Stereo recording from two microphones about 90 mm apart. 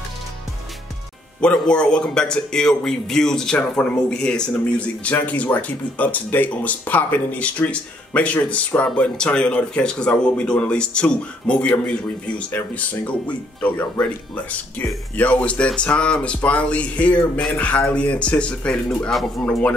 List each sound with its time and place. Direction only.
1.4 s a man's voice: 10° left (ahead or behind)